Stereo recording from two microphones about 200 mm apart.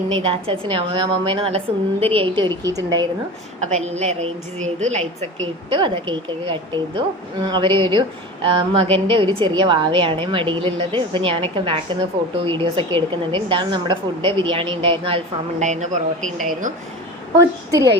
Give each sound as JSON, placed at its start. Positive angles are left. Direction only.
{"t": 0.2, "sound": "a woman's voice", "side_deg": -25}
{"t": 3.6, "sound": "a woman's voice", "side_deg": -35}
{"t": 5.7, "sound": "a woman's voice", "side_deg": -25}
{"t": 17.3, "sound": "a woman's voice", "side_deg": -15}